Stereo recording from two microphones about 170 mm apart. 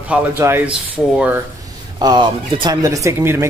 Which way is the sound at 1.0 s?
5° left (ahead or behind).